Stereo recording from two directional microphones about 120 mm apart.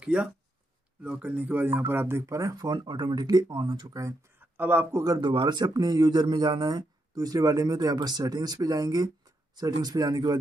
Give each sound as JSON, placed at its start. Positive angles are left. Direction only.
{"t": 0.0, "sound": "speech", "side_deg": -10}
{"t": 4.6, "sound": "speech", "side_deg": -15}
{"t": 5.0, "sound": "speech", "side_deg": -30}